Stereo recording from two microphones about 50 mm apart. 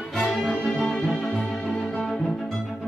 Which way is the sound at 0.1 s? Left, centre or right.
Centre.